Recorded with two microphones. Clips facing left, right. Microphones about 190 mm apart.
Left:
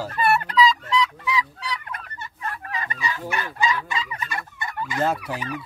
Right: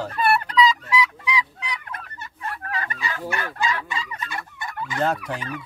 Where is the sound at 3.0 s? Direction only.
55° right (ahead or behind).